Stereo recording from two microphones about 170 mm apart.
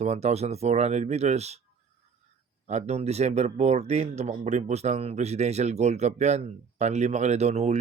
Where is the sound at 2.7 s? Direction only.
40° right (ahead or behind).